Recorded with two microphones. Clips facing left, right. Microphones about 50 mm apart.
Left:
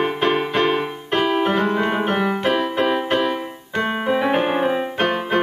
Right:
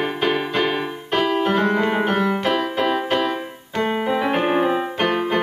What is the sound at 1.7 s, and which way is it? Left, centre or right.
Music, centre.